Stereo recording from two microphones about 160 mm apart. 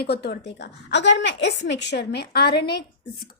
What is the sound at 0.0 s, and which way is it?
A woman's voice, 90° left.